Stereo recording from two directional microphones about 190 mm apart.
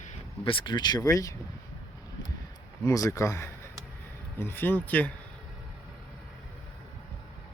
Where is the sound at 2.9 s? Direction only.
15° left (ahead or behind).